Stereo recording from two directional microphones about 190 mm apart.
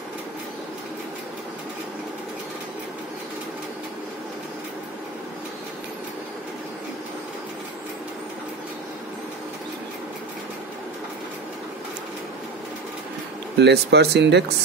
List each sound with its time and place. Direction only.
13.6 s speech: 65° right (ahead or behind)